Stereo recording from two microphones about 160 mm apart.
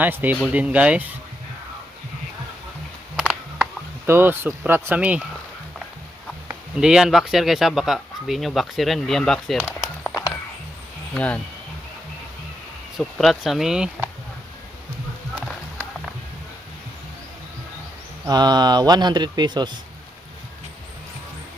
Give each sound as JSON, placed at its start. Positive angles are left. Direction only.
{"t": 0.0, "sound": "speech", "side_deg": -10}
{"t": 3.2, "sound": "a sound", "side_deg": -5}
{"t": 4.0, "sound": "speech", "side_deg": -15}
{"t": 6.7, "sound": "speech", "side_deg": -5}
{"t": 11.1, "sound": "speech", "side_deg": 10}
{"t": 13.0, "sound": "speech", "side_deg": 0}
{"t": 18.3, "sound": "speech", "side_deg": -25}